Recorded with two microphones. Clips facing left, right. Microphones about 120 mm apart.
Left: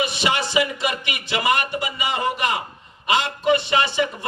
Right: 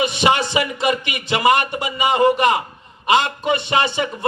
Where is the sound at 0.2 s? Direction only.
25° right (ahead or behind).